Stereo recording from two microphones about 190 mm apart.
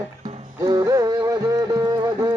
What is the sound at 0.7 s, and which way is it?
Music, 20° right (ahead or behind).